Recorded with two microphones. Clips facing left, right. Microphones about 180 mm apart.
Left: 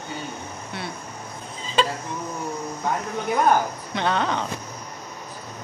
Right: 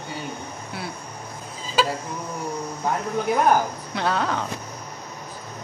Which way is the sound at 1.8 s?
5° right (ahead or behind).